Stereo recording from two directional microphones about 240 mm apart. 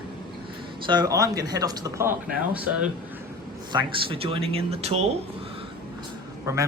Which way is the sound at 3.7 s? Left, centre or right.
Centre.